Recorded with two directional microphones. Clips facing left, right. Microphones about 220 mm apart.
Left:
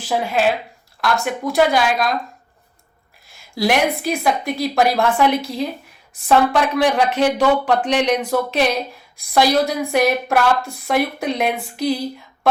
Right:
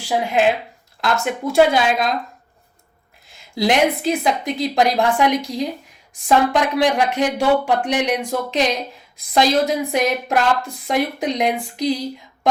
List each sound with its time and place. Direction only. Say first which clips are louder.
0.0 s speech: right 1 dB; 15° right (ahead or behind)
3.3 s speech: right 1 dB; 20° right (ahead or behind)